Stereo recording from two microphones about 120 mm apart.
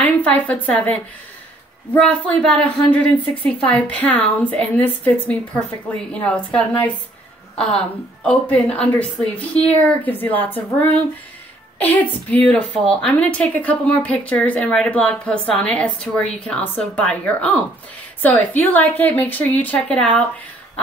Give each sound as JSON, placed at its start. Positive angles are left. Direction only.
{"t": 0.0, "sound": "speech", "side_deg": 10}
{"t": 2.0, "sound": "a woman's voice", "side_deg": 10}